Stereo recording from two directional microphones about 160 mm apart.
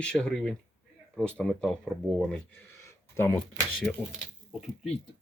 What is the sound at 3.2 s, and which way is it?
Speech, 15° left (ahead or behind).